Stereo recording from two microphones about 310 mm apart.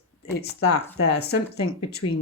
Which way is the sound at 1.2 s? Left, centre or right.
Left.